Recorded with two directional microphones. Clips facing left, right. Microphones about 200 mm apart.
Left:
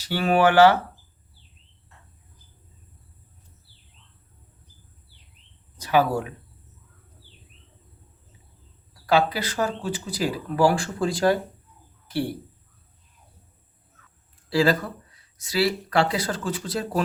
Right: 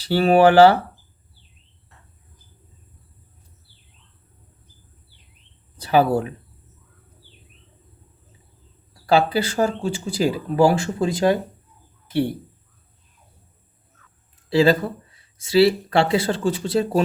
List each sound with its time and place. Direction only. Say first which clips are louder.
0.0 s speech: right 5 dB; 30° right (ahead or behind)
5.7 s speech: right 4 dB; 30° right (ahead or behind)
9.0 s speech: right 3 dB; 30° right (ahead or behind)
14.5 s speech: right 4 dB; 25° right (ahead or behind)